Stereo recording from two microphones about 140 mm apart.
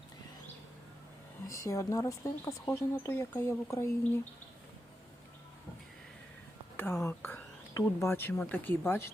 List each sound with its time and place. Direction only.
1.5 s speech: 20° left (ahead or behind)
6.7 s speech: 15° left (ahead or behind)